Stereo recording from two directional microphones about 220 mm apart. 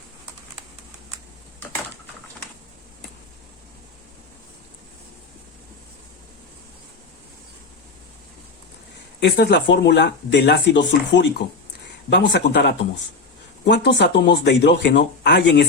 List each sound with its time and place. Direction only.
9.2 s speech: 50° left (ahead or behind)